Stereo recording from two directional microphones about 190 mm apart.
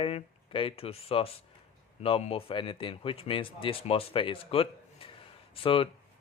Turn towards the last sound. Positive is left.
turn(degrees=30)  # may be behind; listen again after turning